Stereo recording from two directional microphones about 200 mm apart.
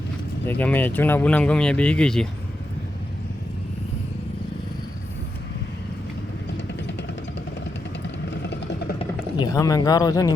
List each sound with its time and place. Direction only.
0.4 s speech: 10° left (ahead or behind)
8.3 s engine: 60° left (ahead or behind)
9.0 s speech: 20° left (ahead or behind)